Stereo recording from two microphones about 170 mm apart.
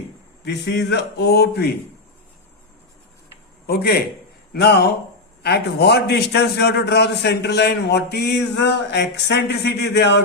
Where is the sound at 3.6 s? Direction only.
65° left (ahead or behind).